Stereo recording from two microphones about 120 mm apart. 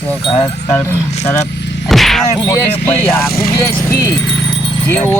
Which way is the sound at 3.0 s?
25° left (ahead or behind).